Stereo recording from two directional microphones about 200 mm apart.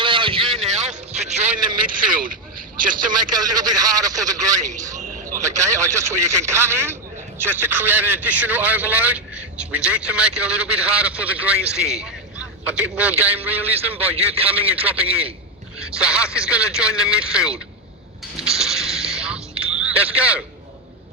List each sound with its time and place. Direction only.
0.0 s vehicle: 25° right (ahead or behind)
2.0 s a sound: 45° right (ahead or behind)
3.1 s a man's voice: 20° right (ahead or behind)
4.9 s a sound: 40° right (ahead or behind)
5.4 s a man's voice: 15° right (ahead or behind)
13.9 s a man's voice: 30° right (ahead or behind)
14.5 s a man's voice: 10° right (ahead or behind)
18.4 s a sound: centre (ahead or behind)
19.7 s speech: 5° right (ahead or behind)